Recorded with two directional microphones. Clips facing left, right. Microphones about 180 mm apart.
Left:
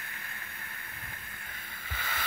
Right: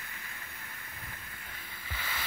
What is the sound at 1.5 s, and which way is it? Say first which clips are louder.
Boat: even; 50° left (ahead or behind).